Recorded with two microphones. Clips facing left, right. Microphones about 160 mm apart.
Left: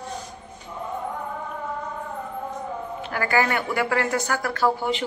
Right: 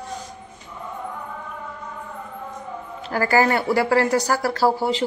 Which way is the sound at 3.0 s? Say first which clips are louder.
Right 4 dB; 35° right (ahead or behind).